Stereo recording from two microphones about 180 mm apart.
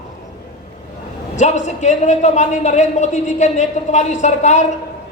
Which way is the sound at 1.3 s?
40° left (ahead or behind).